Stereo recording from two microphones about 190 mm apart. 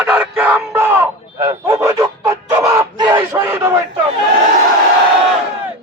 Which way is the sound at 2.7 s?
20° right (ahead or behind).